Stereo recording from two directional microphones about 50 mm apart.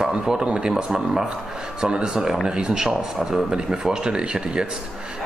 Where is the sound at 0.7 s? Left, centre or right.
Centre.